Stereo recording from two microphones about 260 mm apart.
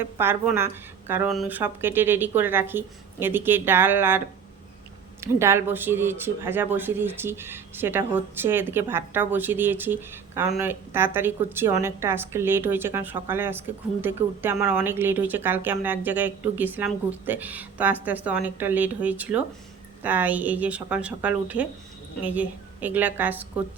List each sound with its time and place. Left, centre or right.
0.0 s speech: centre
5.2 s speech: centre